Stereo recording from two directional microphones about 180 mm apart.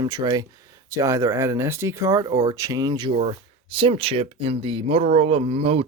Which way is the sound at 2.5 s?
20° right (ahead or behind).